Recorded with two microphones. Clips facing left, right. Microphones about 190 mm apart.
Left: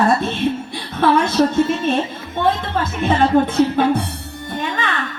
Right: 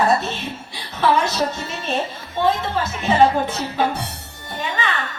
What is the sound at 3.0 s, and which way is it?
Speech, 55° left (ahead or behind).